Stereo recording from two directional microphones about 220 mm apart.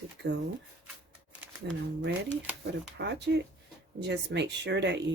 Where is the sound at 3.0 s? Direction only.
50° right (ahead or behind).